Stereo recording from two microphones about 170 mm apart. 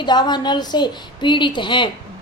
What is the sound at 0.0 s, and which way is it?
A woman's voice, 25° left (ahead or behind).